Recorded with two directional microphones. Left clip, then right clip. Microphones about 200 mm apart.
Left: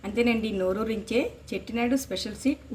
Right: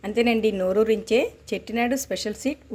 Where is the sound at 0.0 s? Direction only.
40° right (ahead or behind).